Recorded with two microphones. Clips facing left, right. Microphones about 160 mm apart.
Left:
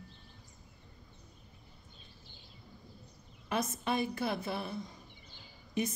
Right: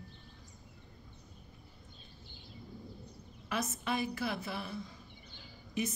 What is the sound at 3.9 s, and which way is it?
Speech, 25° left (ahead or behind).